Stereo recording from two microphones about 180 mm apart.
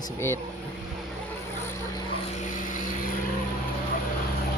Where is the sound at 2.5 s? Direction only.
45° left (ahead or behind).